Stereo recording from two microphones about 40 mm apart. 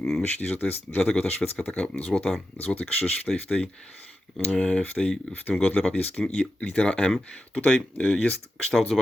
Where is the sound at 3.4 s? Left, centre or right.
Left.